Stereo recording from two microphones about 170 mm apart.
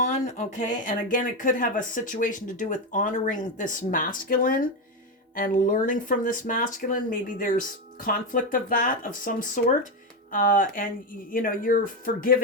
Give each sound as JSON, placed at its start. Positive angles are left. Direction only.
{"t": 0.0, "sound": "speech", "side_deg": 45}